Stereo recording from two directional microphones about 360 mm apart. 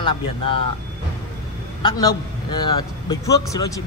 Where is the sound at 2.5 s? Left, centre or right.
Left.